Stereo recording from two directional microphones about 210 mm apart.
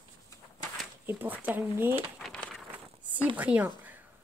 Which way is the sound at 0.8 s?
10° right (ahead or behind).